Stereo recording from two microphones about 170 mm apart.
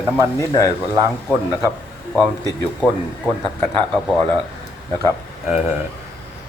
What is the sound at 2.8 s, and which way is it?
Speech, 10° left (ahead or behind).